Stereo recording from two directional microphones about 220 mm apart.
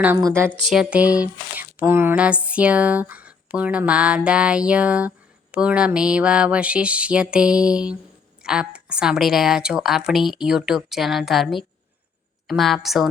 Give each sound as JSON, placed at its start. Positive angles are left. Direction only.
{"t": 0.0, "sound": "a woman's voice", "side_deg": -10}
{"t": 0.6, "sound": "speech", "side_deg": 0}